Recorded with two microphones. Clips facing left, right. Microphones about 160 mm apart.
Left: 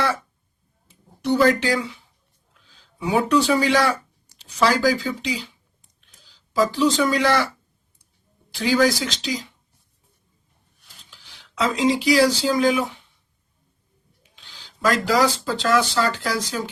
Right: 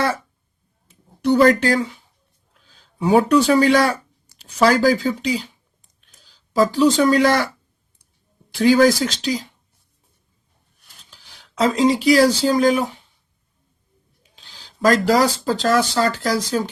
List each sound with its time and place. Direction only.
1.2 s speech: 55° right (ahead or behind)
1.6 s a man's voice: 45° right (ahead or behind)
8.5 s speech: 50° right (ahead or behind)
11.1 s speech: 45° right (ahead or behind)
14.6 s speech: 40° right (ahead or behind)